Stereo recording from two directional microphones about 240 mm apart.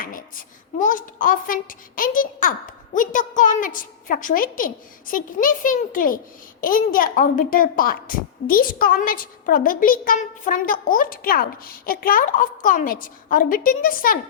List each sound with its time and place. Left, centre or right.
0.8 s a woman's voice: left